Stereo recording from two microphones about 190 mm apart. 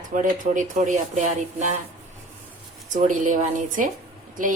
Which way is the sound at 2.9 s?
40° right (ahead or behind).